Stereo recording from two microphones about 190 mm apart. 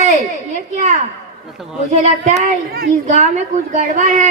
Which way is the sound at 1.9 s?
40° right (ahead or behind).